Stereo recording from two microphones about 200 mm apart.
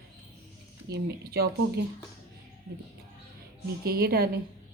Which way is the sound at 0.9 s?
55° right (ahead or behind).